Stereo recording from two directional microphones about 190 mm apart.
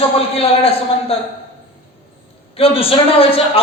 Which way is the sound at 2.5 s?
30° left (ahead or behind).